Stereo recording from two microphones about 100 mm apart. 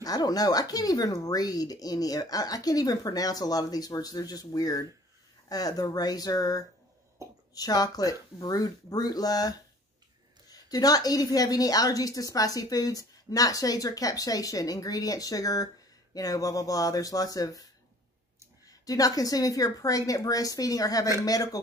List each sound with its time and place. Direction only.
0.0 s a woman's voice: 40° left (ahead or behind)
7.2 s a sound: 30° right (ahead or behind)
7.5 s a woman's voice: 40° left (ahead or behind)
18.7 s a woman's voice: 35° left (ahead or behind)